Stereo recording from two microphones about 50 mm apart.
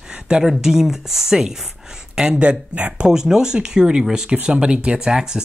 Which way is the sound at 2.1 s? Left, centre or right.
Right.